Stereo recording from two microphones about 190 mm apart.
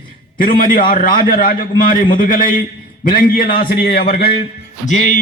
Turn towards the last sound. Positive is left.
turn(degrees=40)  # may be behind; listen again after turning